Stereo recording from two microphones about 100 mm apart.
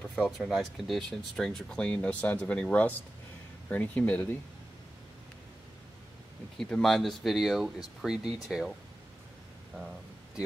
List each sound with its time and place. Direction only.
0.1 s speech: centre (ahead or behind); by 4.4 s 15° left (ahead or behind)
6.6 s speech: 5° left (ahead or behind)